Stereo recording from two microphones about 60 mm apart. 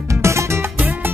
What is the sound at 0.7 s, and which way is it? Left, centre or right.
Music, right.